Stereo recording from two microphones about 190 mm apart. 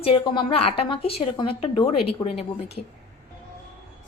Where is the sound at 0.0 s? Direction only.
30° left (ahead or behind).